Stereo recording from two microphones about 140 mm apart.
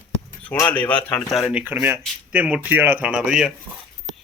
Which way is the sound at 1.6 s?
15° right (ahead or behind).